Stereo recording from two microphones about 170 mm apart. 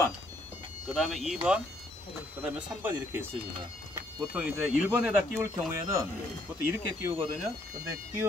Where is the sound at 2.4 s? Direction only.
5° right (ahead or behind).